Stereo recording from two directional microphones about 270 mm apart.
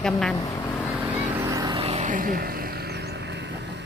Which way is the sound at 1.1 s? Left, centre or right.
Centre.